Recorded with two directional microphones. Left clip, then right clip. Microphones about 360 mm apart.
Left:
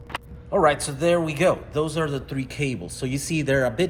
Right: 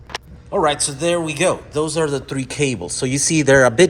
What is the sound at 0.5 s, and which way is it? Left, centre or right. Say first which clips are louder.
Speech: right 2 dB; centre.